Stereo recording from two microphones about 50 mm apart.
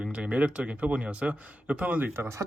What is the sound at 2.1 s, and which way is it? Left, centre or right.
Speech, right.